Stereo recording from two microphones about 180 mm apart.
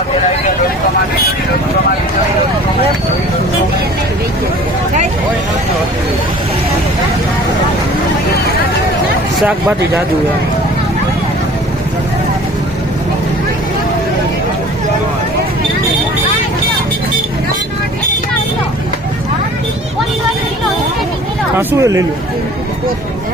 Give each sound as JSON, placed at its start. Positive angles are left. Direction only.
{"t": 9.5, "sound": "speech", "side_deg": -10}
{"t": 21.5, "sound": "speech", "side_deg": -15}